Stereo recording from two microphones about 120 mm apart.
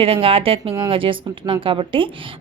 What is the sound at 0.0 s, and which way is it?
A woman's voice, 50° right (ahead or behind).